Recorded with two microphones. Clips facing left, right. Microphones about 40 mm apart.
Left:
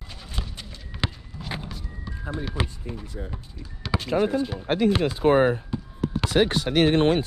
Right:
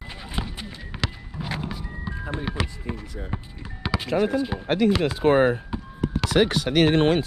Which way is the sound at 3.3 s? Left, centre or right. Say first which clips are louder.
Right 6 dB; right.